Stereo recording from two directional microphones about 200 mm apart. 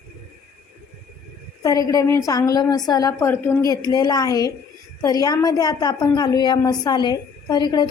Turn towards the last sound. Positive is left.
turn(degrees=20)  # may be behind; listen again after turning